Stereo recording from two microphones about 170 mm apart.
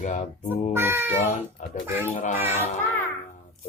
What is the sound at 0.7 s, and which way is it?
Speech, 15° right (ahead or behind).